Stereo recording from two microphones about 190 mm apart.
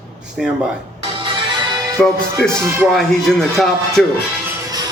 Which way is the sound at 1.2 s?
25° right (ahead or behind).